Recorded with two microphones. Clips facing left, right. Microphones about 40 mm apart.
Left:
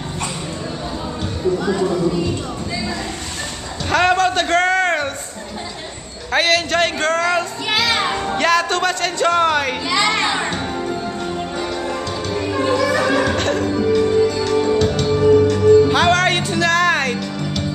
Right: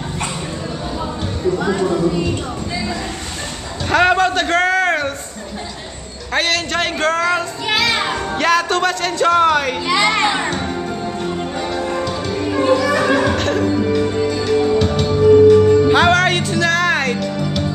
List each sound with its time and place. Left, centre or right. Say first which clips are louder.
1.9 s a child's voice: right 2 dB; centre
3.9 s a sound: right 2 dB; centre
6.3 s music: left 2 dB; centre
8.4 s speech: right 1 dB; centre
9.8 s a child's voice: right 3 dB; centre
10.6 s music: even; centre